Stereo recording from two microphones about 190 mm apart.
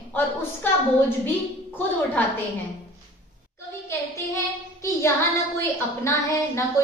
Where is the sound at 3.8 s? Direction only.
15° left (ahead or behind).